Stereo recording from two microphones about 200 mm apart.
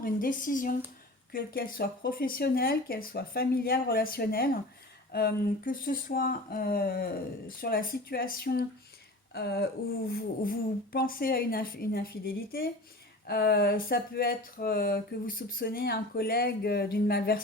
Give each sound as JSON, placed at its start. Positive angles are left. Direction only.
{"t": 0.0, "sound": "speech", "side_deg": 45}